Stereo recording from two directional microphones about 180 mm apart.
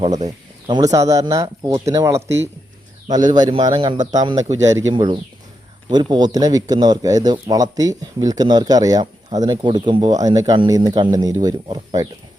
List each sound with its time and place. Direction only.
0.3 s speech: 20° right (ahead or behind)